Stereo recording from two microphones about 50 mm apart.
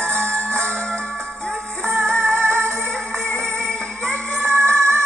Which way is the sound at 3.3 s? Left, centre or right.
Centre.